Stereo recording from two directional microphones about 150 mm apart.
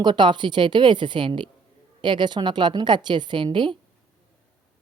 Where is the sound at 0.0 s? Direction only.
30° right (ahead or behind).